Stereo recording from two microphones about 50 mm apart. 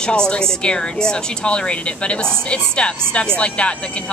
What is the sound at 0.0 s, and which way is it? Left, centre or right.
Speech, centre.